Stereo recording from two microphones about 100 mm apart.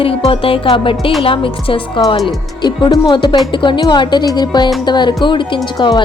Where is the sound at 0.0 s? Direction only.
65° left (ahead or behind).